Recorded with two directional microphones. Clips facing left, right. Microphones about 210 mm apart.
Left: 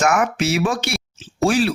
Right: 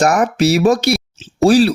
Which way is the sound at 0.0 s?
35° right (ahead or behind).